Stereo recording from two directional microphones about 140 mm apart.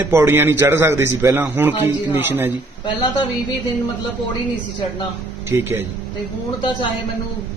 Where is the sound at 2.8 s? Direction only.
30° left (ahead or behind).